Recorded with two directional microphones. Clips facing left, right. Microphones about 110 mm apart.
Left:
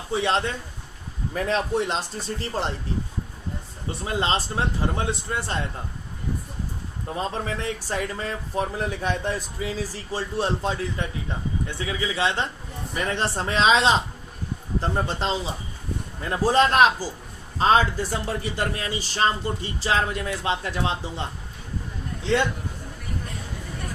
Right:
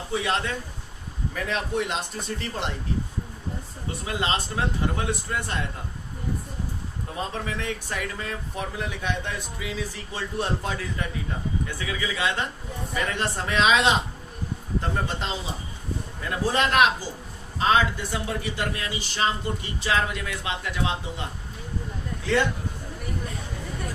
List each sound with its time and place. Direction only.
0.1 s speech: 30° left (ahead or behind)
4.0 s speech: 30° left (ahead or behind)
7.2 s speech: 35° left (ahead or behind)
16.3 s speech: 35° left (ahead or behind)